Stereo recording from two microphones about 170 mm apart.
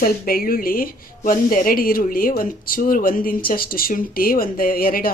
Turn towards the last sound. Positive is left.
turn(degrees=60)  # may be behind; listen again after turning